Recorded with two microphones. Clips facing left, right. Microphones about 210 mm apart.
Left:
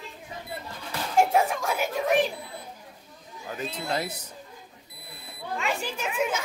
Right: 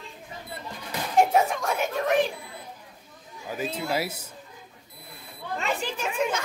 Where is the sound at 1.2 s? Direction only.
Centre (ahead or behind).